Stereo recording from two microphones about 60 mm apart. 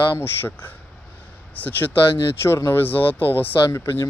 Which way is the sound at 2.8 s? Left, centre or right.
Left.